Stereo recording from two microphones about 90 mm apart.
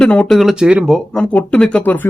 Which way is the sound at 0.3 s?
5° right (ahead or behind).